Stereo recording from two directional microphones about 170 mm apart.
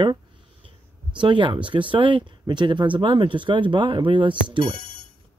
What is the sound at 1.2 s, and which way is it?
Speech, 30° right (ahead or behind).